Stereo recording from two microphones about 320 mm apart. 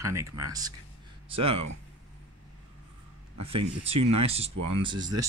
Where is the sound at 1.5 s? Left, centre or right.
Right.